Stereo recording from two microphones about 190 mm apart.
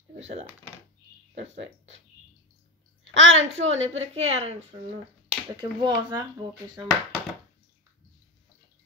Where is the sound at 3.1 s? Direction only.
85° right.